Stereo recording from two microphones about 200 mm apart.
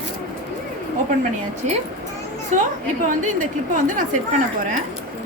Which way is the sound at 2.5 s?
40° right (ahead or behind).